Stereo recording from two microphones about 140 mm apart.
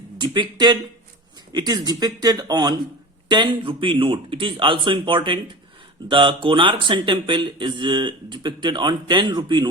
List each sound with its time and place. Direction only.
0.2 s speech: 35° right (ahead or behind)